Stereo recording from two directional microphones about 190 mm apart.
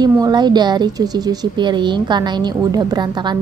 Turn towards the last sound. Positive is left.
turn(degrees=-20)  # may be behind; listen again after turning